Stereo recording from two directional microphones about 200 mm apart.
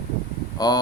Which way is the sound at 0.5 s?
20° left (ahead or behind).